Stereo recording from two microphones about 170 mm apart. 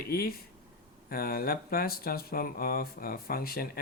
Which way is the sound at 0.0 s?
65° left (ahead or behind).